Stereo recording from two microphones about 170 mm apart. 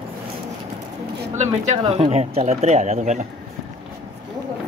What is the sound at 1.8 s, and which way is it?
Speech, 30° right (ahead or behind).